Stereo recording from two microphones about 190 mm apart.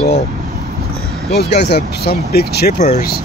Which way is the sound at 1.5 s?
60° left (ahead or behind).